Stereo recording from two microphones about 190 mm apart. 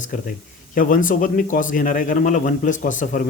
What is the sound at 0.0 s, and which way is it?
A man's voice, 45° left (ahead or behind).